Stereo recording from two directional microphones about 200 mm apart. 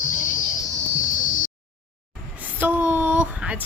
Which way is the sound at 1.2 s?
40° left (ahead or behind).